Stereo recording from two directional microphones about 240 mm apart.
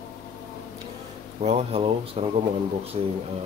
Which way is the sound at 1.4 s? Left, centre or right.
Right.